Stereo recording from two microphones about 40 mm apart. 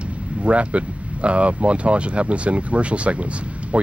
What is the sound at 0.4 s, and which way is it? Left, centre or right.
Speech, right.